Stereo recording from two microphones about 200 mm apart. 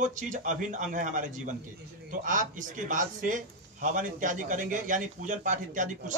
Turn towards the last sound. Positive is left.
turn(degrees=-40)  # may be behind; listen again after turning